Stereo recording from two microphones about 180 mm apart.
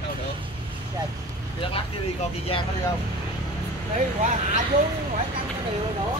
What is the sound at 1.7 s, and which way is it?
Speech, 30° left (ahead or behind).